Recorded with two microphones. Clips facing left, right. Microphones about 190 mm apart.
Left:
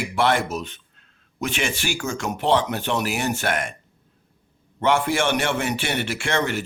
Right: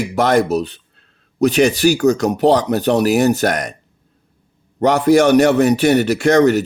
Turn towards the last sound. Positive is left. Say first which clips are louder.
# right 12 dB
turn(degrees=-40)  # may be behind; listen again after turning